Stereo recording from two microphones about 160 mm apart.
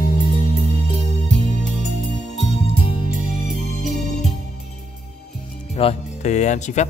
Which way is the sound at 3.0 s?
55° right (ahead or behind).